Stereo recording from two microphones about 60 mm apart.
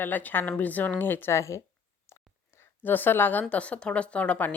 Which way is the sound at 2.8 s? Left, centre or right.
Left.